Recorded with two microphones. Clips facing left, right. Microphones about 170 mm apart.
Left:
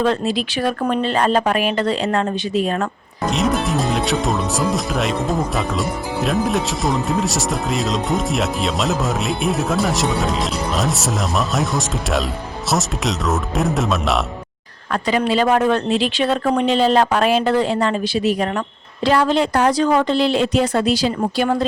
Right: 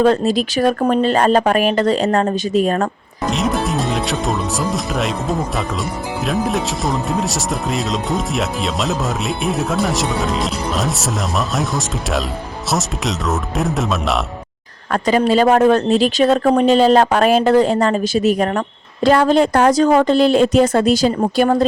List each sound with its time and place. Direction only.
0.0 s speech: 45° right (ahead or behind)
3.2 s speech: centre (ahead or behind)
14.9 s speech: 45° right (ahead or behind)